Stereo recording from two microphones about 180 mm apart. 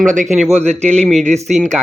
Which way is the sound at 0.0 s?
45° right (ahead or behind).